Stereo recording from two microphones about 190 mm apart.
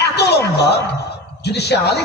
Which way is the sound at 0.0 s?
60° left (ahead or behind).